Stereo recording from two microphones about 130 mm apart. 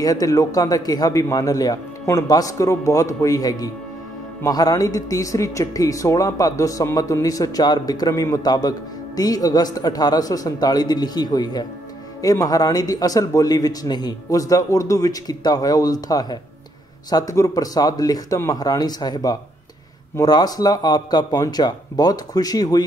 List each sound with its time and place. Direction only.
0.0 s speech: 25° left (ahead or behind)